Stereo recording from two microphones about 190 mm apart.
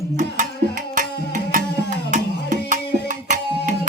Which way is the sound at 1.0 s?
45° right (ahead or behind).